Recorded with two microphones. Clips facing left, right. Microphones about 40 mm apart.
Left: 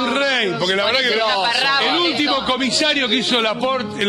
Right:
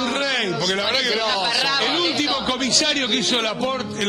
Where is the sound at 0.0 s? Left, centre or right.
Centre.